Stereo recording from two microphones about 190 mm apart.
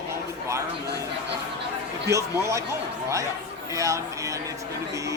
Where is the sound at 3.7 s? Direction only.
15° right (ahead or behind).